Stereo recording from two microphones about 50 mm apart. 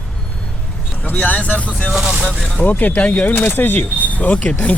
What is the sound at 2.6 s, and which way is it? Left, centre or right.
Speech, left.